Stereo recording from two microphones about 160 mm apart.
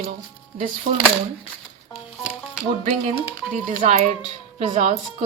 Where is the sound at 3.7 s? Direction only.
50° right (ahead or behind).